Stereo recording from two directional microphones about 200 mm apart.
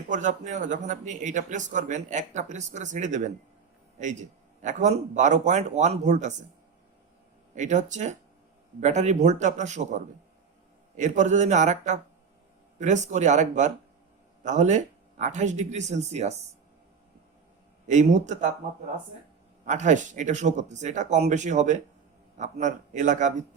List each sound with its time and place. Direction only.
0.1 s speech: 40° right (ahead or behind)
7.5 s speech: 35° right (ahead or behind)
17.8 s speech: 35° right (ahead or behind)
19.6 s speech: 35° right (ahead or behind)